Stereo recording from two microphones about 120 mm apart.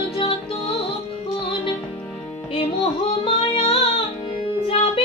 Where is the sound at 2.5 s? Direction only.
50° left (ahead or behind).